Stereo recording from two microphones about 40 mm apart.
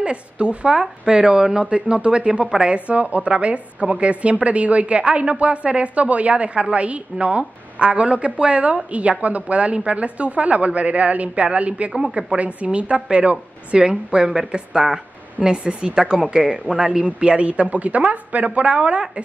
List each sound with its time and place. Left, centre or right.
0.0 s a woman's voice: right
1.7 s a woman's voice: right
11.9 s a woman's voice: right